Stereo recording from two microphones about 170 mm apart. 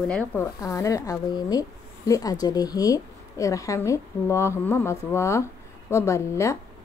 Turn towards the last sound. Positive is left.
turn(degrees=15)  # may be behind; listen again after turning